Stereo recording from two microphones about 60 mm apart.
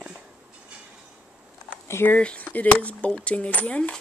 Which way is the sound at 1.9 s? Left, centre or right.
Left.